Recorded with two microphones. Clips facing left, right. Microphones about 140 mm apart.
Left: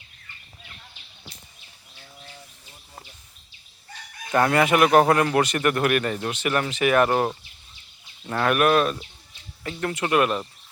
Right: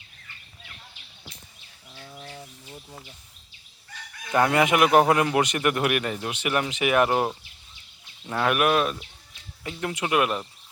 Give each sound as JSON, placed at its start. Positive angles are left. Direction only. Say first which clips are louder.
{"t": 2.0, "sound": "bird", "louder": "right 5 dB", "side_deg": -60}
{"t": 4.3, "sound": "speech", "louder": "left 1 dB", "side_deg": -10}